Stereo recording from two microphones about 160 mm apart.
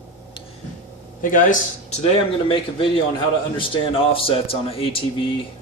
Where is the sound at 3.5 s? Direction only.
35° left (ahead or behind).